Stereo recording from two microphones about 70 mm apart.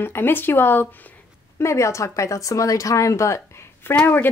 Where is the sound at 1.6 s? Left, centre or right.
Left.